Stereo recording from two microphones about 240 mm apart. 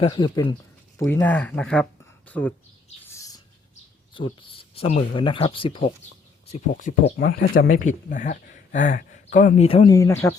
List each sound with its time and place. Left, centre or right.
0.0 s speech: left
0.9 s speech: centre
3.1 s bird: centre
4.1 s speech: left
7.2 s speech: left; by 10.3 s centre